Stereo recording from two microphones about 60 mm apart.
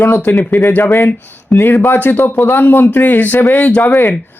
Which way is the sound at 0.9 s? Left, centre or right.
Left.